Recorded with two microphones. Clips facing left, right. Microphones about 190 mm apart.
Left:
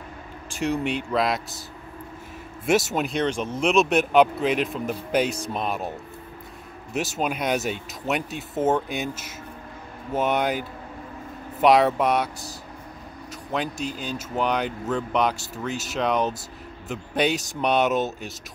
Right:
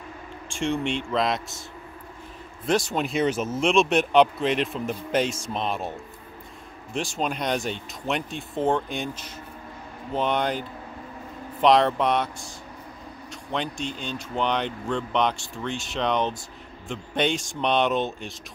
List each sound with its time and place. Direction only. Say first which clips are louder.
0.5 s speech: left 1 dB; 5° left (ahead or behind)
2.6 s speech: left 2 dB; 5° left (ahead or behind)
6.9 s speech: left 2 dB; 5° left (ahead or behind)
13.3 s speech: left 2 dB; 5° left (ahead or behind)
15.3 s speech: left 1 dB; 40° left (ahead or behind)
15.6 s speech: left 1 dB; 5° left (ahead or behind)